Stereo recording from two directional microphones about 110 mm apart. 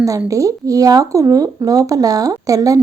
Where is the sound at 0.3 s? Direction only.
30° right (ahead or behind).